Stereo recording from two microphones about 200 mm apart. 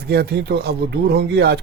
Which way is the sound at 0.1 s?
55° right (ahead or behind).